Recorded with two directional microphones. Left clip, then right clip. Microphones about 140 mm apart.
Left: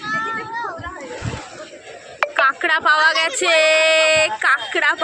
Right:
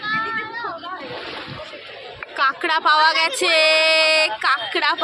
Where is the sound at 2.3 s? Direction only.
Centre (ahead or behind).